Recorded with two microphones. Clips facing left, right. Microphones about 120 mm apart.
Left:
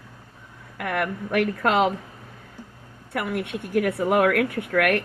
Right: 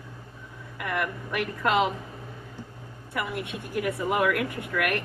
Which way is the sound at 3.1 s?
65° left (ahead or behind).